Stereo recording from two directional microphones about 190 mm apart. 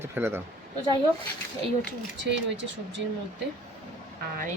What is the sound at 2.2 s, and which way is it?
Speech, 70° right (ahead or behind).